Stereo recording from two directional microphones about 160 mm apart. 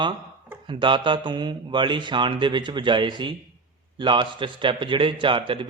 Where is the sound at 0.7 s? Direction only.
30° right (ahead or behind).